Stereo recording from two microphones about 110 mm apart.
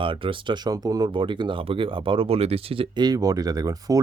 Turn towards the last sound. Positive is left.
turn(degrees=-35)  # may be behind; listen again after turning